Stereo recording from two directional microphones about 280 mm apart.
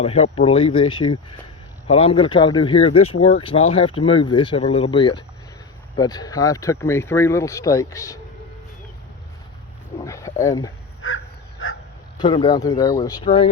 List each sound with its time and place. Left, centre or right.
0.0 s speech: left
10.0 s speech: centre
11.0 s crow: left
11.6 s a sound: left
12.2 s speech: centre